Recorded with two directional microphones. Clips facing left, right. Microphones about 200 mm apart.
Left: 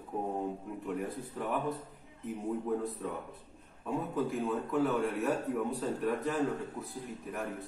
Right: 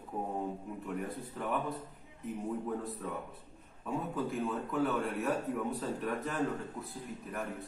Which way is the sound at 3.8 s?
Centre (ahead or behind).